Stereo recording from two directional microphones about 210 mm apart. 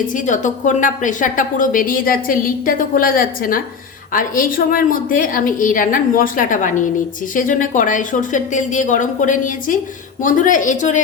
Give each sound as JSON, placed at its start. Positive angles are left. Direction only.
{"t": 0.1, "sound": "a woman's voice", "side_deg": 35}